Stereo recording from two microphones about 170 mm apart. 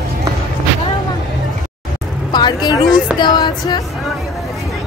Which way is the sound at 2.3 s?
25° left (ahead or behind).